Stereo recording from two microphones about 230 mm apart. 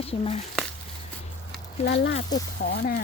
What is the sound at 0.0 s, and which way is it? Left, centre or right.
Speech, left.